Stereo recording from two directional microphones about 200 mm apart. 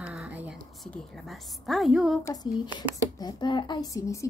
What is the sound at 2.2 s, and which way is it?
Speech, 20° left (ahead or behind).